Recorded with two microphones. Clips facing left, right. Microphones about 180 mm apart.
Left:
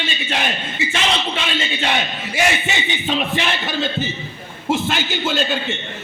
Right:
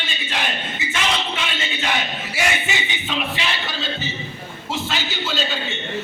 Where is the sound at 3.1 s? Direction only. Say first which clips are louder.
Left 5 dB; 50° left (ahead or behind).